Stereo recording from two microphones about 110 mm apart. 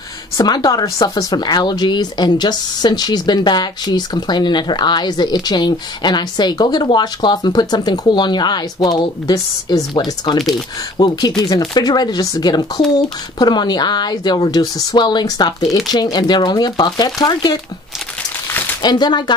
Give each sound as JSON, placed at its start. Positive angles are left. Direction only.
{"t": 0.4, "sound": "speech", "side_deg": 35}
{"t": 18.8, "sound": "speech", "side_deg": 40}